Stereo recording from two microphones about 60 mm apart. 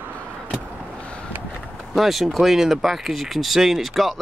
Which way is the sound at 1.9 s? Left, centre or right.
Centre.